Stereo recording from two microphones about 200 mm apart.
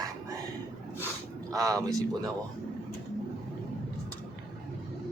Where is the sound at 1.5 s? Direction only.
15° right (ahead or behind).